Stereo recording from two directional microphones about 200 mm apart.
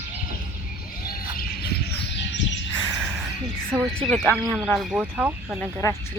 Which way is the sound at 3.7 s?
10° right (ahead or behind).